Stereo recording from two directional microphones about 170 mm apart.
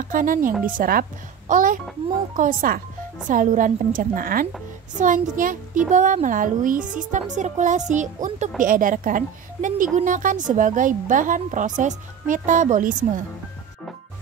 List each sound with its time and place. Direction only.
0.1 s speech: 55° right (ahead or behind)
0.5 s speech: 10° right (ahead or behind)
0.7 s a woman's voice: 55° right (ahead or behind)